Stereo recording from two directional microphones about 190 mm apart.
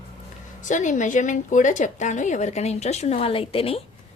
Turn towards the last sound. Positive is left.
turn(degrees=30)  # may be behind; listen again after turning